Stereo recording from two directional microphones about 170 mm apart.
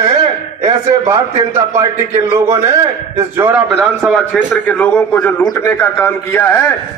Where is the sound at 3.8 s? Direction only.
Centre (ahead or behind).